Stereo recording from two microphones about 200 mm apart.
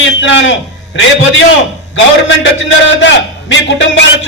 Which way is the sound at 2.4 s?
65° left (ahead or behind).